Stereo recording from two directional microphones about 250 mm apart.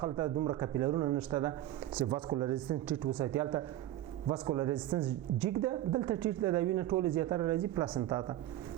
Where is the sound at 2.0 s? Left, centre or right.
Right.